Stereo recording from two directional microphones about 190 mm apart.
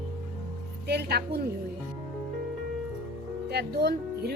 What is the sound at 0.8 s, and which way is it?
Speech, 60° right (ahead or behind).